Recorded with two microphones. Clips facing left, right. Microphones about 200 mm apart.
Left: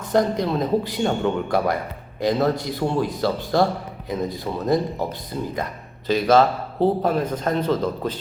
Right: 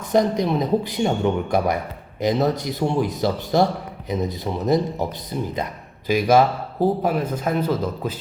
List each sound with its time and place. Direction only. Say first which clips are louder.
0.1 s a man's voice: right 1 dB; 15° right (ahead or behind)